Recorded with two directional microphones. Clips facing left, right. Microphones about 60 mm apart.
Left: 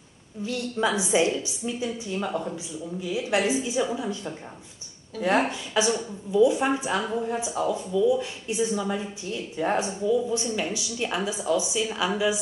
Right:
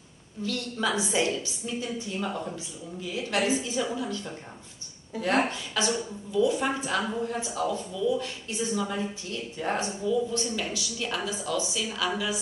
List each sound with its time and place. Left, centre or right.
0.4 s a woman's voice: centre